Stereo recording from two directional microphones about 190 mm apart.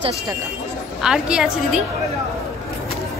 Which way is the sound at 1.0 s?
5° right (ahead or behind).